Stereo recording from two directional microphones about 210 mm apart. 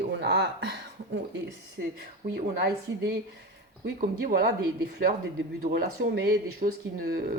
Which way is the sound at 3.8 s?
50° right (ahead or behind).